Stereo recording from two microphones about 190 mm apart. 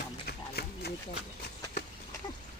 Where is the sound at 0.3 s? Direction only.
55° left (ahead or behind).